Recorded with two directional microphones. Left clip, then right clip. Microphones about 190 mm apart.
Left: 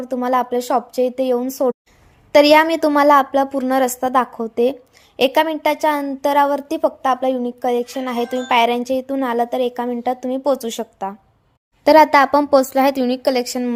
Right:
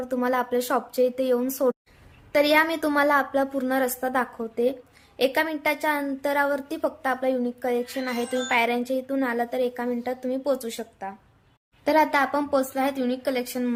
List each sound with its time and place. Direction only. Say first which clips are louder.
0.0 s speech: left 6 dB; 25° left (ahead or behind)
2.3 s a woman's voice: left 9 dB; 40° left (ahead or behind)